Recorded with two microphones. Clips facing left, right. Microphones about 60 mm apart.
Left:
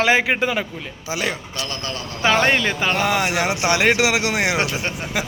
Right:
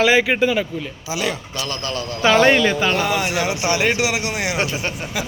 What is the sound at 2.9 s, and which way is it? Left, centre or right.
Speech, left.